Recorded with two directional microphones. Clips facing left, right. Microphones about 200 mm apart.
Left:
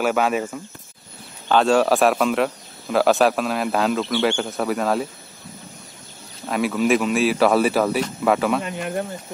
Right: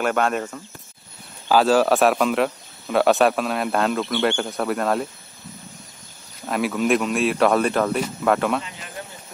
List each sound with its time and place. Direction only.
0.0 s a man's voice: 5° left (ahead or behind)
6.4 s a man's voice: centre (ahead or behind)
8.6 s speech: 55° left (ahead or behind)